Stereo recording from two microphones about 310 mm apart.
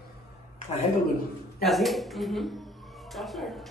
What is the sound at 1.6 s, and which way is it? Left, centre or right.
Music, centre.